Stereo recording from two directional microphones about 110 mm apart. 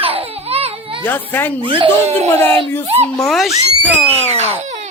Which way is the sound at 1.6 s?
50° right (ahead or behind).